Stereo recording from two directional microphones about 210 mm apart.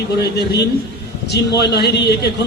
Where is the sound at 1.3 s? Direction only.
50° left (ahead or behind).